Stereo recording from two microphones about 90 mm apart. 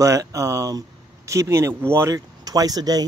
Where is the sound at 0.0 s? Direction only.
40° right (ahead or behind).